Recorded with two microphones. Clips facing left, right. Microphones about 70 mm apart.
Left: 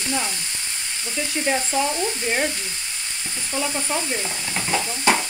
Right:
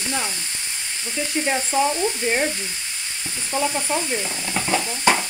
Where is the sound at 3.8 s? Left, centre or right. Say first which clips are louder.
Right 2 dB; centre.